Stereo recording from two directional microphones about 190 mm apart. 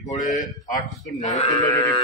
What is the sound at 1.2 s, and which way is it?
Livestock, 40° left (ahead or behind).